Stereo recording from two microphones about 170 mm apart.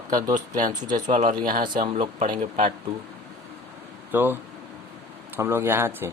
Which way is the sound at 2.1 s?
50° right (ahead or behind).